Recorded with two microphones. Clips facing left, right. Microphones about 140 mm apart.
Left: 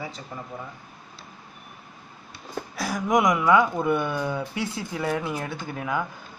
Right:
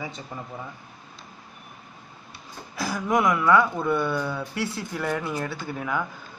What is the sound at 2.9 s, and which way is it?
Speech, 15° left (ahead or behind).